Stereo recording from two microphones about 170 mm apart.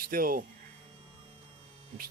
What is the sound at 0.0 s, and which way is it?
Speech, 55° right (ahead or behind).